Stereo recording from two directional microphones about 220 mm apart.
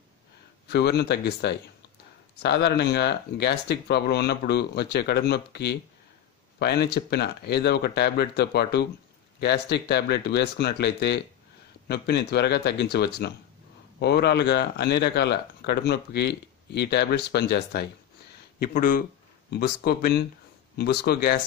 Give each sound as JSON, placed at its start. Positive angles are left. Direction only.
{"t": 0.7, "sound": "speech", "side_deg": 50}